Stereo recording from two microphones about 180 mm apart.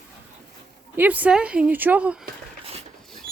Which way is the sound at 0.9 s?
10° right (ahead or behind).